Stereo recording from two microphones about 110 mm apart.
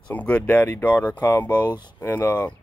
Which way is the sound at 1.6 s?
40° left (ahead or behind).